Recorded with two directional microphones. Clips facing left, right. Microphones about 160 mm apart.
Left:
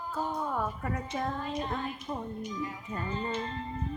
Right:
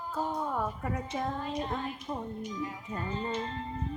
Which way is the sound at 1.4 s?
30° right (ahead or behind).